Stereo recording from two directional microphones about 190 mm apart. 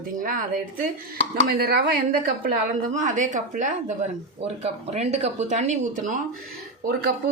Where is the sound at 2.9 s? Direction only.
40° right (ahead or behind).